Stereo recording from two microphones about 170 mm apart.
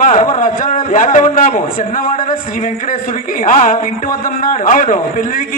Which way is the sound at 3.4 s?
50° left (ahead or behind).